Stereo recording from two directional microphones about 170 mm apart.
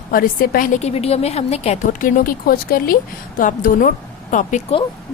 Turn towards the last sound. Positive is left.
turn(degrees=50)  # may be behind; listen again after turning